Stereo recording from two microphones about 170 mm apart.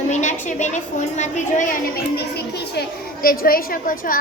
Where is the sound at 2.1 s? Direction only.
70° left (ahead or behind).